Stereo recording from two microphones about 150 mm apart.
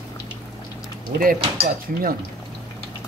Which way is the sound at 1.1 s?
60° right (ahead or behind).